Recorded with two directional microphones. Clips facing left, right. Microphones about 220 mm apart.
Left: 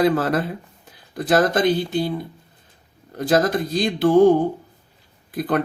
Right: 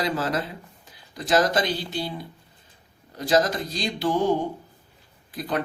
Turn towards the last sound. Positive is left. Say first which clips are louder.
# left 6 dB
turn(degrees=55)  # may be behind; listen again after turning